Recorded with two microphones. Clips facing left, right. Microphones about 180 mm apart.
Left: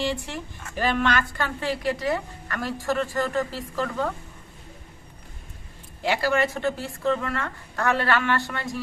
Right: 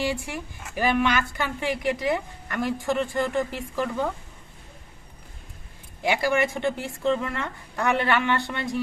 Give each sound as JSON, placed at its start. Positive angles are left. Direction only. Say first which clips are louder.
{"t": 0.0, "sound": "a woman's voice", "louder": "even", "side_deg": -10}
{"t": 6.0, "sound": "a woman's voice", "louder": "even", "side_deg": -15}